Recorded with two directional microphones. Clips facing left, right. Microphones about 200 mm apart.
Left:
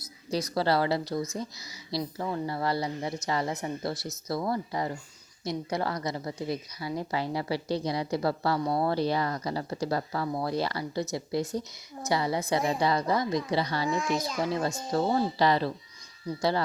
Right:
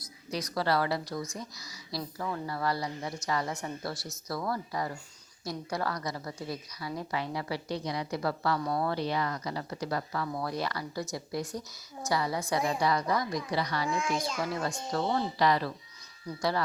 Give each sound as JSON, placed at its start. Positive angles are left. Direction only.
{"t": 0.3, "sound": "a woman's voice", "side_deg": 30}
{"t": 13.8, "sound": "a child's voice", "side_deg": 0}
{"t": 14.4, "sound": "a woman's voice", "side_deg": 25}